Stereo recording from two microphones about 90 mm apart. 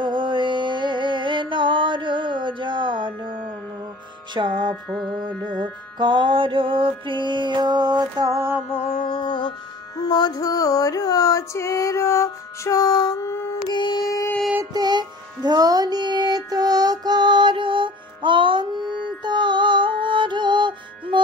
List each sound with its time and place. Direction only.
0.0 s mantra: 60° right (ahead or behind)
4.3 s music: 60° right (ahead or behind)
4.8 s music: centre (ahead or behind)
5.2 s music: 55° right (ahead or behind)
9.1 s music: 60° left (ahead or behind)
10.0 s a sound: 55° left (ahead or behind)
13.3 s carnatic music: 30° left (ahead or behind)
13.7 s carnatic music: 55° left (ahead or behind)
14.7 s music: 50° right (ahead or behind)